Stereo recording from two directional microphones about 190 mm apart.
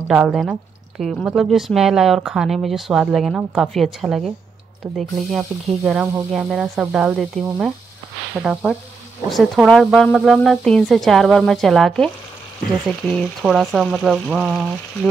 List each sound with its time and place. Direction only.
0.1 s speech: 5° right (ahead or behind)